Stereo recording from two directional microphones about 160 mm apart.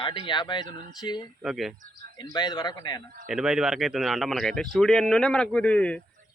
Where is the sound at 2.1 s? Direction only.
25° left (ahead or behind).